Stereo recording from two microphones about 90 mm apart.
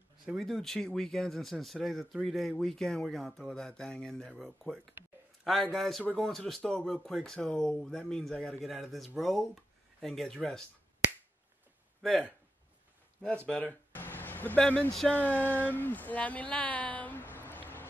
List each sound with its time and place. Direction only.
0.4 s speech: 5° left (ahead or behind)
12.0 s speech: 5° left (ahead or behind)
13.2 s speech: 10° left (ahead or behind)
14.9 s speech: 5° left (ahead or behind)
15.1 s speech: 20° left (ahead or behind)